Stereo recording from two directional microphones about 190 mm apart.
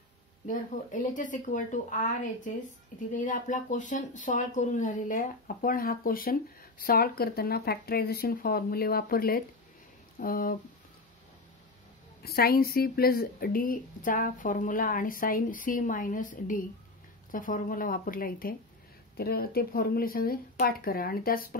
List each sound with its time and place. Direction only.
0.5 s speech: 45° left (ahead or behind)
12.2 s speech: 55° left (ahead or behind)